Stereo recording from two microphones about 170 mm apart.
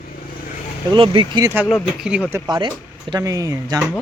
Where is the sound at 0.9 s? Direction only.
30° right (ahead or behind).